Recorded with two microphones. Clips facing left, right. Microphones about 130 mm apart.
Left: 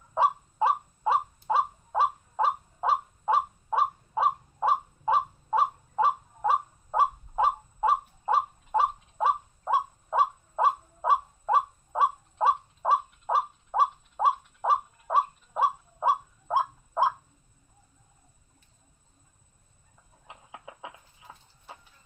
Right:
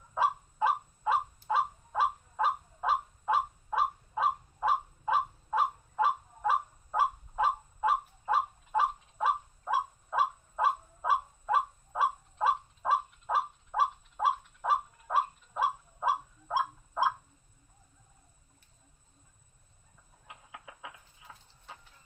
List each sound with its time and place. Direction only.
0.1 s crow: 30° left (ahead or behind)
13.7 s bird: 30° left (ahead or behind)
20.2 s chicken: 25° left (ahead or behind)